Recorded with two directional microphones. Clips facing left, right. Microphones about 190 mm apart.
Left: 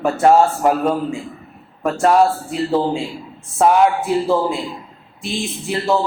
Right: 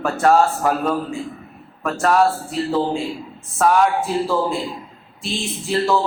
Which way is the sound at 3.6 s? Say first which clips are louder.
Left 3 dB; 25° left (ahead or behind).